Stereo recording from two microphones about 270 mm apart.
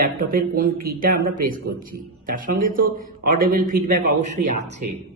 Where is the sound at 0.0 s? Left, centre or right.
Right.